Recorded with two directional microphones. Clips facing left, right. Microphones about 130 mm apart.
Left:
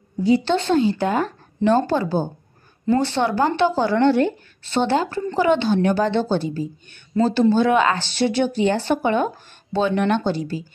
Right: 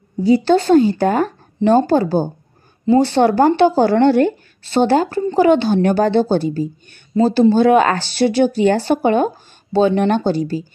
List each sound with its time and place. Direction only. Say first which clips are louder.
0.2 s speech: right 5 dB; 40° right (ahead or behind)